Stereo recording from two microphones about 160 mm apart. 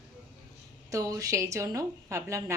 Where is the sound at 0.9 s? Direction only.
20° right (ahead or behind).